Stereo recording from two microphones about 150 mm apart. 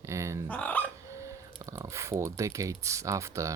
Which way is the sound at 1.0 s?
20° right (ahead or behind).